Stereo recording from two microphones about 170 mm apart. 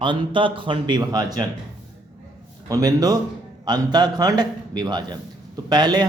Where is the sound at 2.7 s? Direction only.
20° right (ahead or behind).